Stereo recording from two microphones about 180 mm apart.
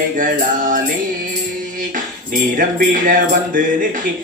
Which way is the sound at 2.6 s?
50° right (ahead or behind).